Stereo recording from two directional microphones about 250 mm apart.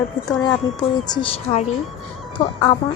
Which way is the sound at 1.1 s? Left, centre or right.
Left.